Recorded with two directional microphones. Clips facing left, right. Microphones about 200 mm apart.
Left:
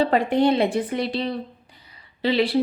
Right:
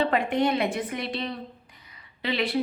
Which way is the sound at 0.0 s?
35° left (ahead or behind).